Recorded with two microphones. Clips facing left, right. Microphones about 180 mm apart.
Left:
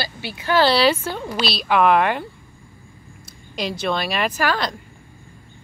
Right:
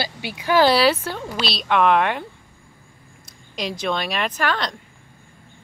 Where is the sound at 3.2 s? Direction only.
Centre (ahead or behind).